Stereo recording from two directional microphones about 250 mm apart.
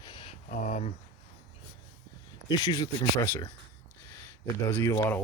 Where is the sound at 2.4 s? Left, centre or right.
Centre.